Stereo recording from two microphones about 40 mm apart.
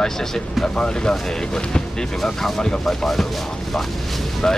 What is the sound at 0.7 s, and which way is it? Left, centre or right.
Speech, centre.